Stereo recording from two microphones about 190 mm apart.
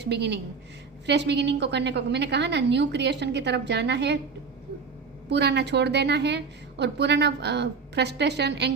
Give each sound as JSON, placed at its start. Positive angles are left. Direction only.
{"t": 0.0, "sound": "a woman's voice", "side_deg": -65}
{"t": 5.3, "sound": "a woman's voice", "side_deg": -65}